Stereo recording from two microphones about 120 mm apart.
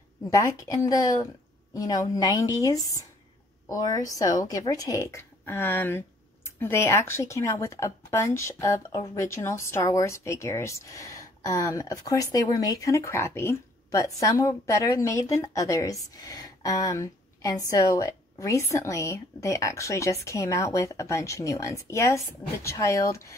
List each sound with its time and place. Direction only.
0.3 s speech: 25° left (ahead or behind)